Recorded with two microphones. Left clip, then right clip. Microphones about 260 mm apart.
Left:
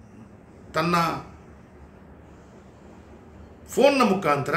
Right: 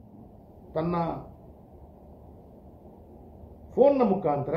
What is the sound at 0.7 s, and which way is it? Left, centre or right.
Speech, left.